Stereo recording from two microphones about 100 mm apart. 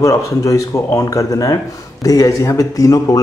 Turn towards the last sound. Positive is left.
turn(degrees=35)  # may be behind; listen again after turning